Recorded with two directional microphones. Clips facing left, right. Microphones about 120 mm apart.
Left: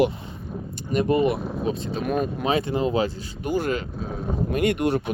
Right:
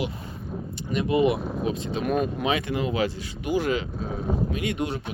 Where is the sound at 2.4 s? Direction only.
35° left (ahead or behind).